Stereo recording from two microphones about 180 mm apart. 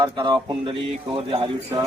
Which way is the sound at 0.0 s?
25° right (ahead or behind).